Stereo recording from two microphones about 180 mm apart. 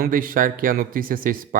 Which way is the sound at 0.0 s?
50° right (ahead or behind).